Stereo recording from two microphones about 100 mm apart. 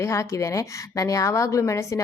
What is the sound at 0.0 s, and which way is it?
A woman's voice, 30° left (ahead or behind).